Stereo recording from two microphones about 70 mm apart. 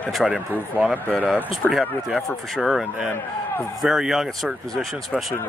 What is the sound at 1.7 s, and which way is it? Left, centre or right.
Speech, centre.